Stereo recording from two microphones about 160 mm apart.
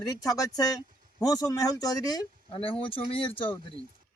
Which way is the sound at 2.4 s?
35° left (ahead or behind).